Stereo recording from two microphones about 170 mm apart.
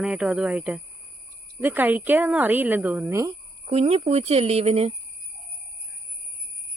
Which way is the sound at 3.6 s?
35° right (ahead or behind).